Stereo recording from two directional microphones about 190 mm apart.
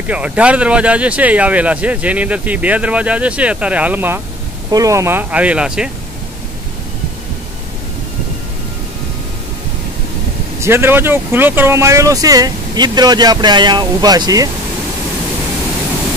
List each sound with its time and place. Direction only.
0.1 s speech: 5° right (ahead or behind)
10.6 s speech: 15° right (ahead or behind)